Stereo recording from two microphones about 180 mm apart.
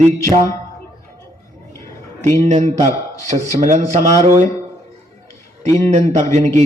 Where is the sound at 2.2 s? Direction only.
45° right (ahead or behind).